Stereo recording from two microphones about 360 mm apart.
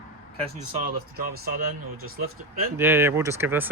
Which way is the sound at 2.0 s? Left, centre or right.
Right.